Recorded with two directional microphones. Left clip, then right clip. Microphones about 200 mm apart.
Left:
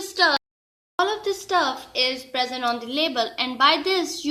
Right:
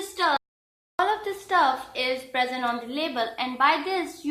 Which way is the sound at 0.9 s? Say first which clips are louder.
Left 2 dB; 35° left (ahead or behind).